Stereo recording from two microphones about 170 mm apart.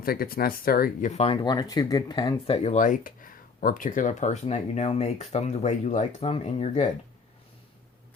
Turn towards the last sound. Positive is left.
turn(degrees=40)  # may be behind; listen again after turning